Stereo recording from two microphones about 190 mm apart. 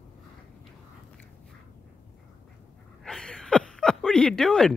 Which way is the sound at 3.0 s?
5° left (ahead or behind).